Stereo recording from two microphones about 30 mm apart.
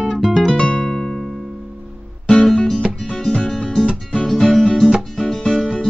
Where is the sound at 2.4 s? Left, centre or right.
Left.